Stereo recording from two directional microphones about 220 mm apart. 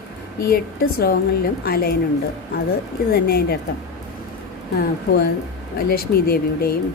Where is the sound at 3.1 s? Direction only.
45° left (ahead or behind).